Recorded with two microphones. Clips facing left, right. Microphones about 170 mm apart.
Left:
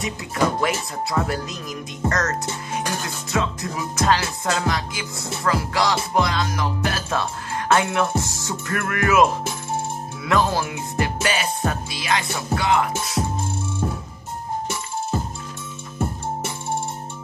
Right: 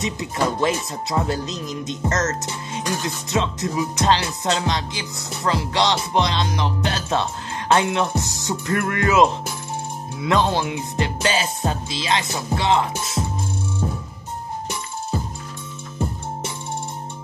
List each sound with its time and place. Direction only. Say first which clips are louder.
0.0 s music: even; 25° right (ahead or behind)